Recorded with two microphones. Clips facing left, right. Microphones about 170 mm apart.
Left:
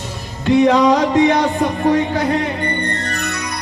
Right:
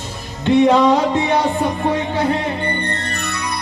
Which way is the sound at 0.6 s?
30° right (ahead or behind).